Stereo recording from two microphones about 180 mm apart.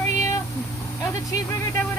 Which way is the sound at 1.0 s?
20° left (ahead or behind).